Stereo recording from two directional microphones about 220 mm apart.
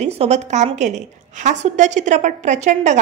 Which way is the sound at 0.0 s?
30° right (ahead or behind).